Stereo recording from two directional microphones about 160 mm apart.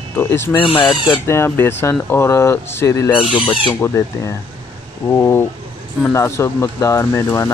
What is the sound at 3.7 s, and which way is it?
Speech, 15° left (ahead or behind).